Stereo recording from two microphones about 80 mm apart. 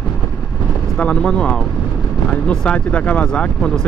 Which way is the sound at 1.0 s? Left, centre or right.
Centre.